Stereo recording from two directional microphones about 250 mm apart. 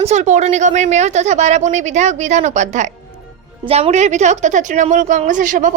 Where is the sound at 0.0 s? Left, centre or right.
Right.